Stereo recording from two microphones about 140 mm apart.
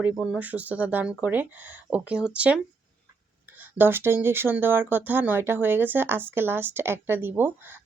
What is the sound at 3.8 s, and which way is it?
Speech, 15° right (ahead or behind).